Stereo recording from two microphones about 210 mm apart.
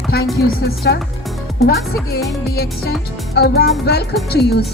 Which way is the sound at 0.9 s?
50° left (ahead or behind).